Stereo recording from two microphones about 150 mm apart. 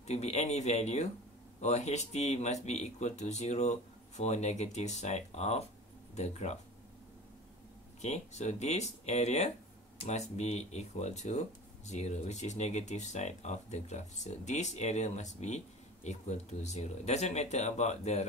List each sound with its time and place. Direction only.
0.0 s speech: 50° left (ahead or behind)
8.0 s speech: 50° left (ahead or behind)